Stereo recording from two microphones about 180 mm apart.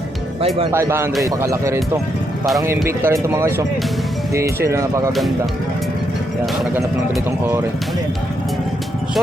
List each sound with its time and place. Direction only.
0.7 s speech: 15° right (ahead or behind)